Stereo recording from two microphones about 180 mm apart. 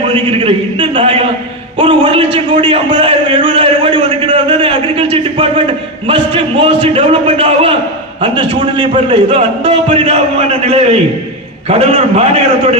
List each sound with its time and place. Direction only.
0.1 s a man's voice: 30° right (ahead or behind)
1.8 s a sound: 30° right (ahead or behind)
6.1 s a man's voice: 30° right (ahead or behind)